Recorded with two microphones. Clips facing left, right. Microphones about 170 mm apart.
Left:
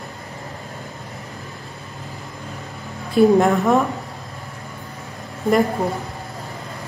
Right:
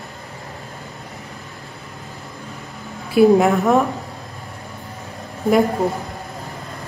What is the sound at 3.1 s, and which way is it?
Speech, 5° right (ahead or behind).